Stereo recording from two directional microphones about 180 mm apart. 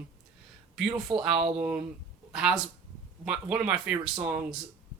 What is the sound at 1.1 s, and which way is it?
Speech, 30° right (ahead or behind).